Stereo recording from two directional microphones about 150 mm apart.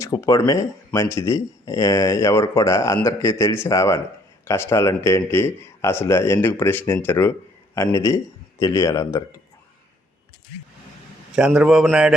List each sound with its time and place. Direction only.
0.0 s a man's voice: 20° left (ahead or behind)
11.3 s a man's voice: 5° right (ahead or behind)